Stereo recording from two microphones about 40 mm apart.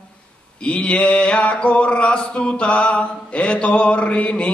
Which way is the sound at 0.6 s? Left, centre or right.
Left.